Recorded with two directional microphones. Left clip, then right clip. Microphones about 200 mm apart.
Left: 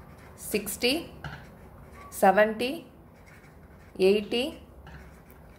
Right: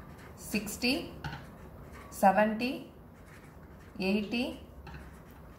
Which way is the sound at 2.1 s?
60° left (ahead or behind).